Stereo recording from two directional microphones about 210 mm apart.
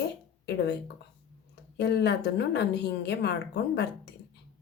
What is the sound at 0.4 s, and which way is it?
Speech, 55° left (ahead or behind).